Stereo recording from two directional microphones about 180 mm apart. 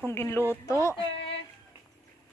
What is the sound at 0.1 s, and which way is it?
Speech, 15° left (ahead or behind).